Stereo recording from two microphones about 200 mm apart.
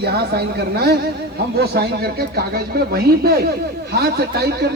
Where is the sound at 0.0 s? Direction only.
55° right (ahead or behind).